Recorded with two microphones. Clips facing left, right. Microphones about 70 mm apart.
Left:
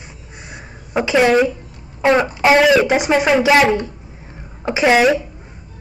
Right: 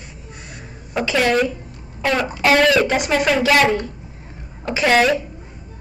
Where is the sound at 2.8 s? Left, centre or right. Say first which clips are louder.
Left 3 dB; centre.